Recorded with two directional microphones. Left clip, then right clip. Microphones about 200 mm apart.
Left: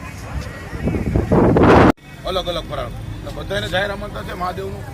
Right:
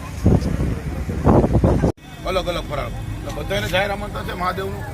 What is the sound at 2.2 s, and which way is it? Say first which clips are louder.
A man's voice: even; centre (ahead or behind).